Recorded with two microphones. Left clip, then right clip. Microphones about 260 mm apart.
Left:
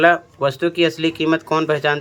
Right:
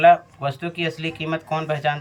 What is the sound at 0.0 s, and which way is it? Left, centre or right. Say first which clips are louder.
Speech: even; centre.